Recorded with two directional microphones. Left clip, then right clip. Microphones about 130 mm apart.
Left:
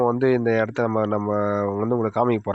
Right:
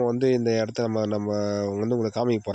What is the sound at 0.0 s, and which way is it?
Speech, 15° right (ahead or behind).